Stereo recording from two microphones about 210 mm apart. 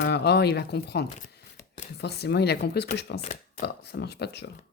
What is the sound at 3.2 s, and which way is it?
Speech, 35° left (ahead or behind).